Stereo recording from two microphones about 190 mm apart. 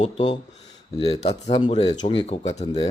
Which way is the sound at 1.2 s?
30° left (ahead or behind).